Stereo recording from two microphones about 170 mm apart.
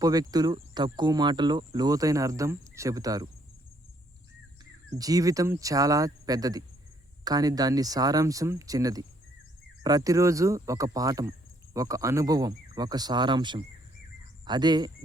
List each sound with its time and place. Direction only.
0.0 s speech: 20° right (ahead or behind)
4.9 s speech: 20° right (ahead or behind)